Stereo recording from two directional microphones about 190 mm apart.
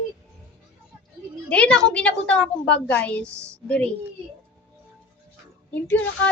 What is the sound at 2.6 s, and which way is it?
Speech, 65° left (ahead or behind).